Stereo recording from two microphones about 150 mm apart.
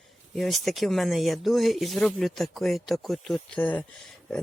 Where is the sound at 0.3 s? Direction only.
Centre (ahead or behind).